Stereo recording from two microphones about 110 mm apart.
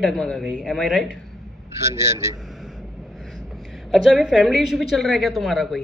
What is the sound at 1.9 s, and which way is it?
Speech, 25° right (ahead or behind).